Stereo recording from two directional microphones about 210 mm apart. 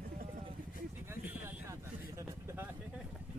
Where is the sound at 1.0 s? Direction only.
10° right (ahead or behind).